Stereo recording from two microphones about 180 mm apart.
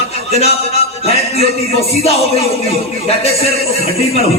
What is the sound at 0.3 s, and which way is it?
A man's voice, 35° left (ahead or behind).